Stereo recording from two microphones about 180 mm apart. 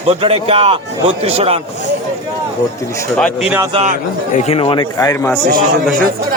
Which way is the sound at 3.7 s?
35° right (ahead or behind).